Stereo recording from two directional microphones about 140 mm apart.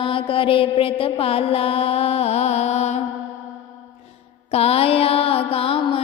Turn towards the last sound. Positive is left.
turn(degrees=40)  # may be behind; listen again after turning